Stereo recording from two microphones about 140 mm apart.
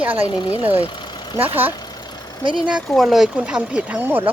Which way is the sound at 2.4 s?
35° right (ahead or behind).